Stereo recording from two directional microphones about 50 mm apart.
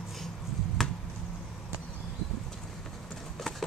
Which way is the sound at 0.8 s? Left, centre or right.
Centre.